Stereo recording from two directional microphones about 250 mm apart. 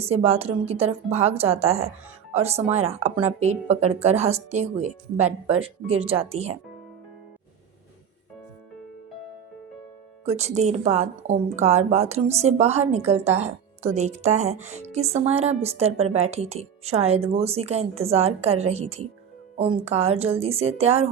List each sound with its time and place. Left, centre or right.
0.0 s a woman's voice: right
10.2 s a woman's voice: right